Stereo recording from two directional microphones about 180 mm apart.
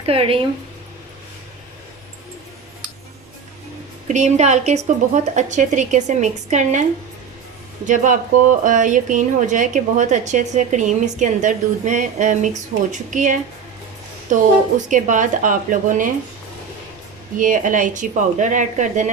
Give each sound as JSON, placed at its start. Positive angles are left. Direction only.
{"t": 0.0, "sound": "a woman's voice", "side_deg": -30}
{"t": 4.1, "sound": "a woman's voice", "side_deg": -40}
{"t": 7.9, "sound": "a woman's voice", "side_deg": -45}
{"t": 17.3, "sound": "a woman's voice", "side_deg": -45}